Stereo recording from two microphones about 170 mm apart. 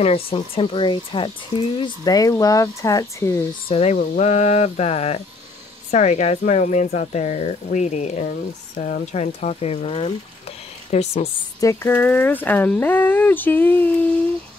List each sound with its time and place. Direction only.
0.0 s speech: 35° left (ahead or behind); by 3.4 s 15° left (ahead or behind)
3.6 s speech: 35° left (ahead or behind)
8.3 s speech: 55° left (ahead or behind)
11.6 s speech: 15° left (ahead or behind)